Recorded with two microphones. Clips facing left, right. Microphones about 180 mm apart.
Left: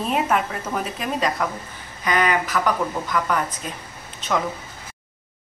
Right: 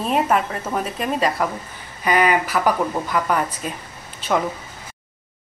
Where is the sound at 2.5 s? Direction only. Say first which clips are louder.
Right 3 dB; 25° right (ahead or behind).